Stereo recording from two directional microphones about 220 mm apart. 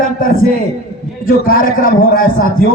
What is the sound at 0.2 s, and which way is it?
A man's voice, 40° left (ahead or behind).